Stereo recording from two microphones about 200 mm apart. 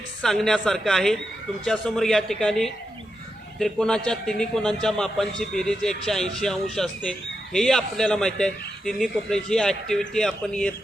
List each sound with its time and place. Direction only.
0.2 s speech: centre (ahead or behind)